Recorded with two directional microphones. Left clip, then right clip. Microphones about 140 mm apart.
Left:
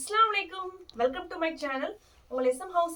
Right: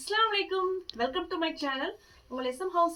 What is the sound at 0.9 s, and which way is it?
Speech, 30° left (ahead or behind).